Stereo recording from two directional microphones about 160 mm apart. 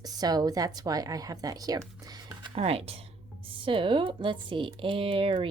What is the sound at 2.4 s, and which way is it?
Speech, 35° right (ahead or behind).